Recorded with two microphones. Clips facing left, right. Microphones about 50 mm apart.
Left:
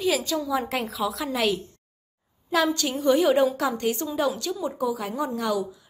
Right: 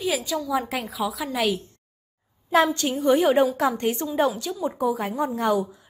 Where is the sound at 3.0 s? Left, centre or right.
Right.